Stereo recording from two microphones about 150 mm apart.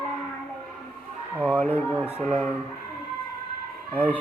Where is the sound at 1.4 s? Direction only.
10° left (ahead or behind).